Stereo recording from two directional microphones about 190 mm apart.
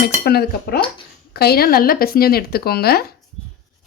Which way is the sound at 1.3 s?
55° left (ahead or behind).